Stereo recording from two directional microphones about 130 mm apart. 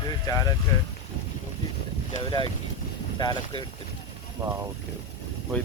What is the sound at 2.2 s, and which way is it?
Speech, 35° left (ahead or behind).